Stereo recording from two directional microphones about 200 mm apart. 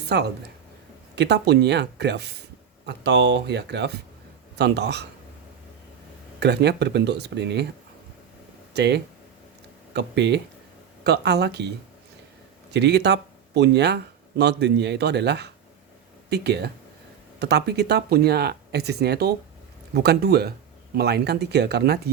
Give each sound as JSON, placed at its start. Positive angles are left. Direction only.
{"t": 0.1, "sound": "speech", "side_deg": -60}
{"t": 6.4, "sound": "speech", "side_deg": -55}
{"t": 8.7, "sound": "speech", "side_deg": -55}
{"t": 12.7, "sound": "speech", "side_deg": -60}